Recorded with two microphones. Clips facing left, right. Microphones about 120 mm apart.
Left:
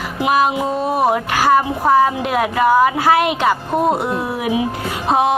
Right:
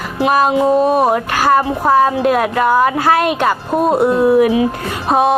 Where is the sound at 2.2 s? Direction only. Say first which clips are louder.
Right 2 dB; 10° left (ahead or behind).